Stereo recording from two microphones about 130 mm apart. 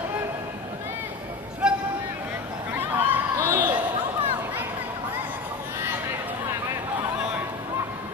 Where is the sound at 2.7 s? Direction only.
15° right (ahead or behind).